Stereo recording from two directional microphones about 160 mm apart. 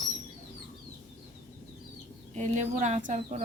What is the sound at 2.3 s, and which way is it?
Speech, 45° right (ahead or behind).